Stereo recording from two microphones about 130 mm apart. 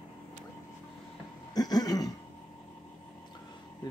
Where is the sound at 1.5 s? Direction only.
30° left (ahead or behind).